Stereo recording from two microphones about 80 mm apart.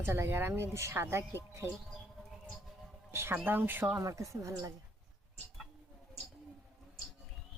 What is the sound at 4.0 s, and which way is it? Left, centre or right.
Speech, right.